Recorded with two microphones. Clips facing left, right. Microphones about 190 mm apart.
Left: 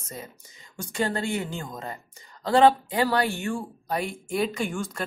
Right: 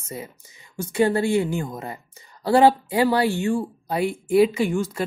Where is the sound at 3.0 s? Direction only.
25° right (ahead or behind).